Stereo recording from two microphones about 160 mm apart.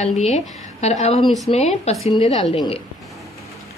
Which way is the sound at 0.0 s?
45° left (ahead or behind).